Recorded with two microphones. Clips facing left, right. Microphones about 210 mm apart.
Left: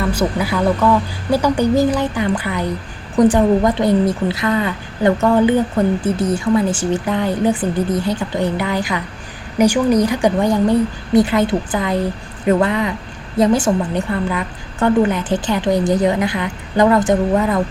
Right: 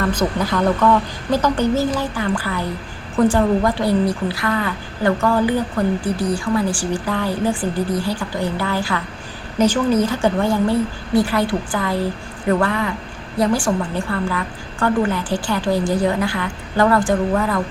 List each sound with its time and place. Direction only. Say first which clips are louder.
0.0 s a woman's voice: left 1 dB; 10° left (ahead or behind)